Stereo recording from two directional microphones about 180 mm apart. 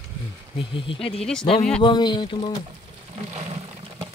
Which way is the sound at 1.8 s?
25° left (ahead or behind).